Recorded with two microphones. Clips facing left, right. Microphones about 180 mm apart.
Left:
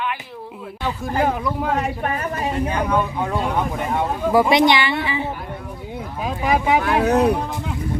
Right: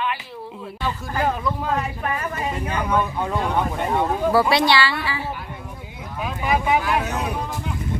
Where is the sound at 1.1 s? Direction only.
15° left (ahead or behind).